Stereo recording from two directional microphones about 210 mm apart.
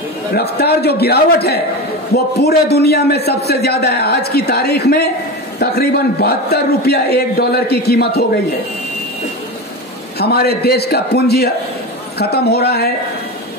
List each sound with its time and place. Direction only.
0.3 s a man's voice: 50° left (ahead or behind)
10.1 s a man's voice: 50° left (ahead or behind)